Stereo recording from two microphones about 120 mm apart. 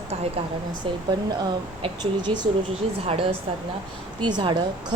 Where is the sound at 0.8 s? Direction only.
45° right (ahead or behind).